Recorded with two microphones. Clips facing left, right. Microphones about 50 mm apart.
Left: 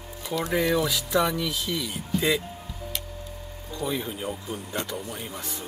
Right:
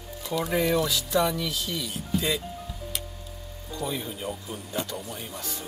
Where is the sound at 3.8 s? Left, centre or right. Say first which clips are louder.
Left 2 dB; centre.